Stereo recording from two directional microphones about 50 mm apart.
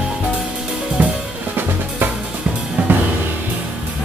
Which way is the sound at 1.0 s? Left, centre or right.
Right.